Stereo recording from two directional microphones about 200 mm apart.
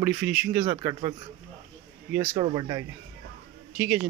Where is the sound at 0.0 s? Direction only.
10° right (ahead or behind).